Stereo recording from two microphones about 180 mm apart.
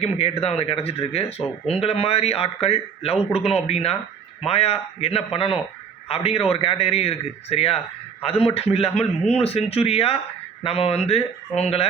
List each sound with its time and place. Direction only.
0.0 s speech: 35° left (ahead or behind)